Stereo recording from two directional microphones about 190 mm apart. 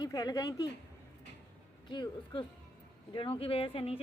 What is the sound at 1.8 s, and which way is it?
Speech, 25° left (ahead or behind).